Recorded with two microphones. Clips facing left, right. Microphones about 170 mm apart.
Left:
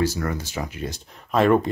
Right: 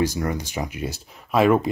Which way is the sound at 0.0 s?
15° right (ahead or behind).